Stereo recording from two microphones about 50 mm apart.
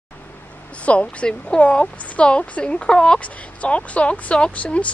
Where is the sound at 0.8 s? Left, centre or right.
Left.